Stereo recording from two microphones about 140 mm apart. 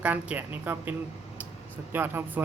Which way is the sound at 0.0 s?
10° right (ahead or behind).